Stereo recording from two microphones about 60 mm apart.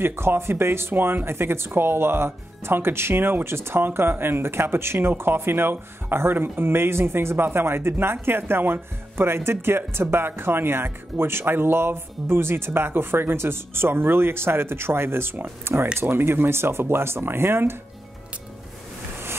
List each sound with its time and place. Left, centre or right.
0.0 s speech: right